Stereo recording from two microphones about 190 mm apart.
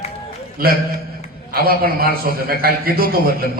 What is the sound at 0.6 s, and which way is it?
A man's voice, 50° right (ahead or behind).